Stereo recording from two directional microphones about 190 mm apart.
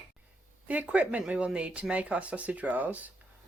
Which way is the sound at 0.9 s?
5° right (ahead or behind).